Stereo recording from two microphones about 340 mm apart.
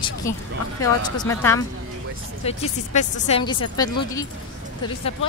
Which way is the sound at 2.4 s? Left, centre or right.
Centre.